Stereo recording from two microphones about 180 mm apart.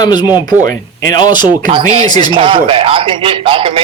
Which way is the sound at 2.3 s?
30° right (ahead or behind).